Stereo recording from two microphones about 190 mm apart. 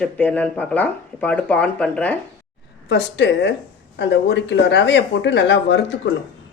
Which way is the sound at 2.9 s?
65° left (ahead or behind).